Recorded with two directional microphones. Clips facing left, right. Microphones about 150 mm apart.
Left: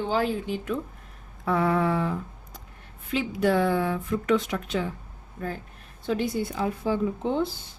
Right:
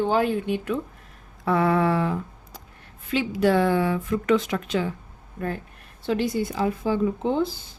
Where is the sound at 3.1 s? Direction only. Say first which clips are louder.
Right 3 dB; 90° right.